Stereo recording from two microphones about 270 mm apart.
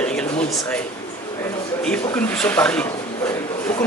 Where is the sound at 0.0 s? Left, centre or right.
Centre.